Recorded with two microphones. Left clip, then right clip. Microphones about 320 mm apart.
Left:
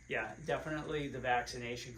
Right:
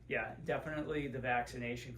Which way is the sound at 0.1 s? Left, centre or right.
Centre.